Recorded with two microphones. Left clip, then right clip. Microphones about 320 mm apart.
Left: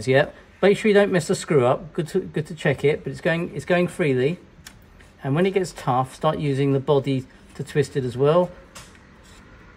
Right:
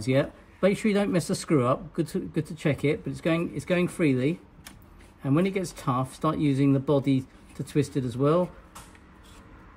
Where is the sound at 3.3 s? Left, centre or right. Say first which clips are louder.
Left 5 dB; left.